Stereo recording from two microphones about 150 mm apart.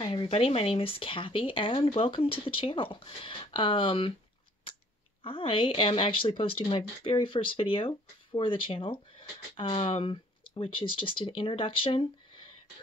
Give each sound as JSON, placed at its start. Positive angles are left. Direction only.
{"t": 0.0, "sound": "speech", "side_deg": 35}
{"t": 5.2, "sound": "speech", "side_deg": 35}